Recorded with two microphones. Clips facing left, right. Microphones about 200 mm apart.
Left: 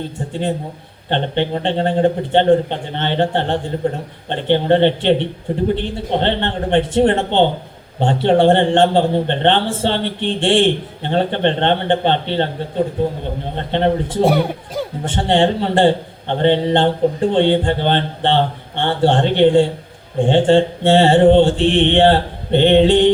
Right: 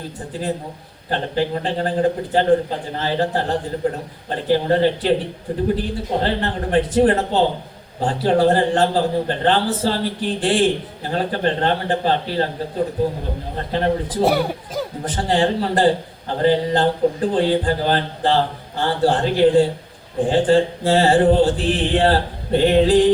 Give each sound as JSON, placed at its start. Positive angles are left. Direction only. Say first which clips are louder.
{"t": 1.1, "sound": "a man's voice", "louder": "left 2 dB", "side_deg": 25}
{"t": 13.6, "sound": "a man's voice", "louder": "left 3 dB", "side_deg": 25}
{"t": 14.2, "sound": "speech", "louder": "left 3 dB", "side_deg": -5}
{"t": 15.0, "sound": "a man's voice", "louder": "left 4 dB", "side_deg": 25}